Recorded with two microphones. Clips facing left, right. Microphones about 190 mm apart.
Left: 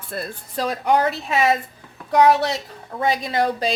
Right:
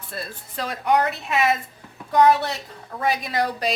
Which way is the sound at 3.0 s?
25° left (ahead or behind).